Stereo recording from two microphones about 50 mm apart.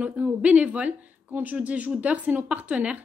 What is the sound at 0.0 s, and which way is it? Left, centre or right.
Speech, right.